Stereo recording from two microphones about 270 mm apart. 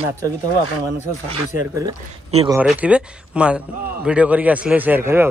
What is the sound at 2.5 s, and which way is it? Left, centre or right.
A man's voice, centre.